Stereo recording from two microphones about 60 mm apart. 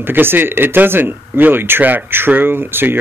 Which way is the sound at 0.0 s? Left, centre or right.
Right.